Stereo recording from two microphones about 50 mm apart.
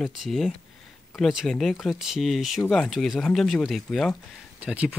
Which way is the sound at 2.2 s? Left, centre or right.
Centre.